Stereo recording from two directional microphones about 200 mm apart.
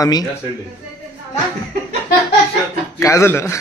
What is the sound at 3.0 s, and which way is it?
Speech, 15° left (ahead or behind).